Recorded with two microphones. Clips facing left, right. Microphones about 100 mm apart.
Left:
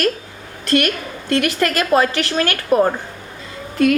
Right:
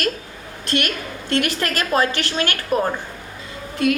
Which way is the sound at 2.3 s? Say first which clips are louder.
Left 4 dB; 40° left (ahead or behind).